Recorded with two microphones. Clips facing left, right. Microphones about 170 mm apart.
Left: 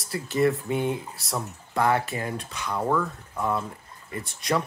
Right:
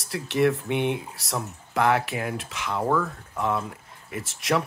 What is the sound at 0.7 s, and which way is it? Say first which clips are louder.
Speech: right 1 dB; 75° right (ahead or behind).